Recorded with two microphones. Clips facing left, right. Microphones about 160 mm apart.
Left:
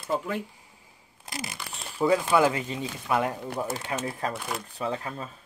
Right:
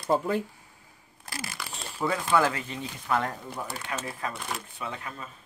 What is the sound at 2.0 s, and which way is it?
Speech, 15° left (ahead or behind).